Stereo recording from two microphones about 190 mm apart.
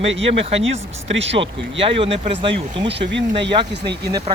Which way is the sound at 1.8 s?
30° right (ahead or behind).